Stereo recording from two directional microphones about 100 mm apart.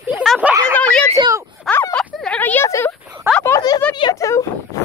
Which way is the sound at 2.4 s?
20° left (ahead or behind).